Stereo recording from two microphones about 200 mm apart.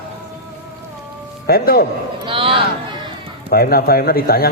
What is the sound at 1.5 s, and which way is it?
Speech, 50° left (ahead or behind).